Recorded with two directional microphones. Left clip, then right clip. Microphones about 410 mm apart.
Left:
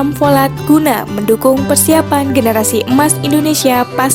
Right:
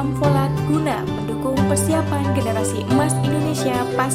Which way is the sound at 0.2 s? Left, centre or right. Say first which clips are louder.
Left 10 dB; left.